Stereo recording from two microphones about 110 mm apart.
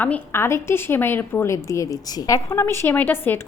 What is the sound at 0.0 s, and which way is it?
A woman's voice, 20° left (ahead or behind).